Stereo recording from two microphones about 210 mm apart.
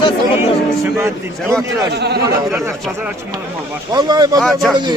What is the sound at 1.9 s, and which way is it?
Speech, 50° right (ahead or behind).